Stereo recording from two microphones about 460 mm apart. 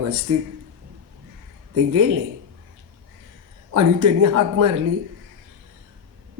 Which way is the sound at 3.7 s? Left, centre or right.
Right.